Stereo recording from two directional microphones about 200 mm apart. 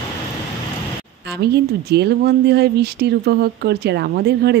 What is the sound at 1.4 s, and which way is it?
Speech, 55° right (ahead or behind).